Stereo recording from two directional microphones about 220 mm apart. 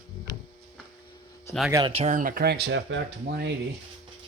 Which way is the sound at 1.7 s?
25° right (ahead or behind).